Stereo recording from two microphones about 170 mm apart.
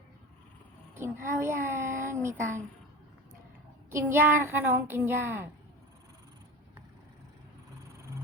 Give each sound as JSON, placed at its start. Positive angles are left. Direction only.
{"t": 0.9, "sound": "speech", "side_deg": -15}
{"t": 3.8, "sound": "child singing", "side_deg": -15}